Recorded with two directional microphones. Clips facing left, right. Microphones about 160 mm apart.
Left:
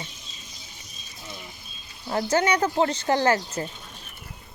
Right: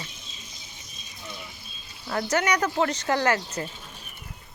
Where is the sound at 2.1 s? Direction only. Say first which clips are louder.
Left 2 dB; 30° left (ahead or behind).